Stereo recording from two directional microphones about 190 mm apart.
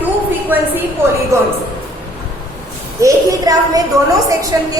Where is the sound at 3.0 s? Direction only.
20° right (ahead or behind).